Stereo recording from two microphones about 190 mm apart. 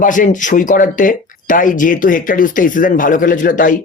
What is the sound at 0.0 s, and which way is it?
Speech, 45° left (ahead or behind).